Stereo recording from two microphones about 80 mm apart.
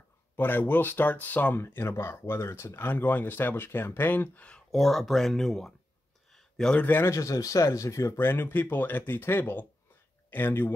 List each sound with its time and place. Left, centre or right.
0.4 s speech: left
4.5 s speech: centre
6.3 s a sound: centre
6.9 s speech: left